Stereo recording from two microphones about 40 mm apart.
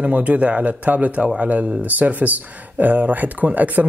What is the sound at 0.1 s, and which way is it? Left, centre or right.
A man's voice, right.